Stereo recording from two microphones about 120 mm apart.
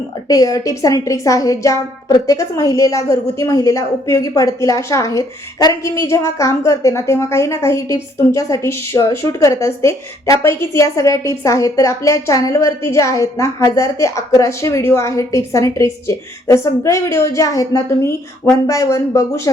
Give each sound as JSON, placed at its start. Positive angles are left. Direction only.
{"t": 0.3, "sound": "a woman's voice", "side_deg": 30}